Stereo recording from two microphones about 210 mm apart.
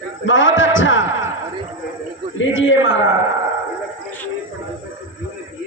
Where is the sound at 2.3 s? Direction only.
65° left (ahead or behind).